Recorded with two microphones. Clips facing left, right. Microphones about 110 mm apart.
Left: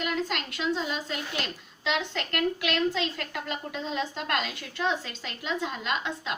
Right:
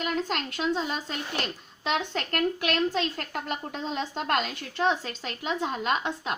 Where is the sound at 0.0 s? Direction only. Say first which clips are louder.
Right 1 dB; 35° right (ahead or behind).